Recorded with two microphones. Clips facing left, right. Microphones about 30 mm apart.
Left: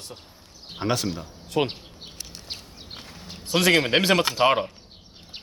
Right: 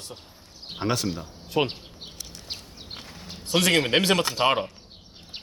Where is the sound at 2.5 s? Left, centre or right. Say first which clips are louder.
Right 2 dB; centre.